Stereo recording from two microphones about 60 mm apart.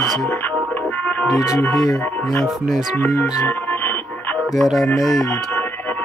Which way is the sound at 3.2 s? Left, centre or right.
Left.